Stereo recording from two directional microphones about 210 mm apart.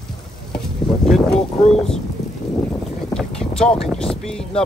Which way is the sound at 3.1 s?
5° left (ahead or behind).